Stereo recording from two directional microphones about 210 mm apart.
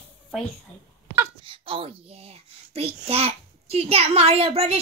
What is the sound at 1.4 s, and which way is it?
A child's voice, 25° right (ahead or behind).